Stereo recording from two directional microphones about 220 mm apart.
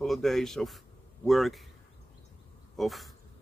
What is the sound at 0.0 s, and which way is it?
Speech, centre (ahead or behind).